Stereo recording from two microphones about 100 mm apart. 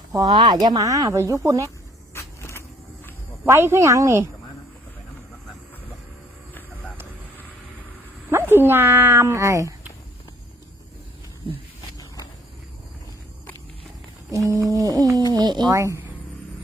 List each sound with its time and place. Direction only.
0.1 s speech: 35° right (ahead or behind)
0.3 s speech: 45° right (ahead or behind); by 1.6 s 30° right (ahead or behind)
2.1 s vehicle: 25° left (ahead or behind)
3.4 s speech: 25° right (ahead or behind)
8.3 s speech: 25° right (ahead or behind)
11.9 s a sound: 40° left (ahead or behind)
14.3 s speech: 35° right (ahead or behind)
15.7 s speech: 30° right (ahead or behind)